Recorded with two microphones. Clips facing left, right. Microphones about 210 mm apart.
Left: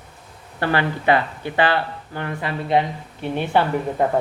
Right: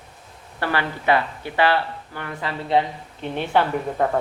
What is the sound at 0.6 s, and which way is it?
A woman's voice, 20° left (ahead or behind).